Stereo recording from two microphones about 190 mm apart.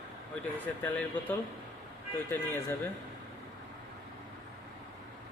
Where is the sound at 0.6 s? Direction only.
10° left (ahead or behind).